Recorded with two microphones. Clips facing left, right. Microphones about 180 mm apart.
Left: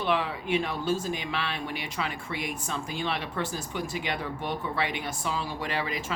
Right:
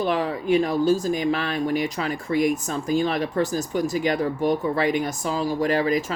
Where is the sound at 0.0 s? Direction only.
40° right (ahead or behind).